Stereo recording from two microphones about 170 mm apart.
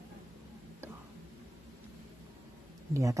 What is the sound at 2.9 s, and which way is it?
Speech, 20° right (ahead or behind).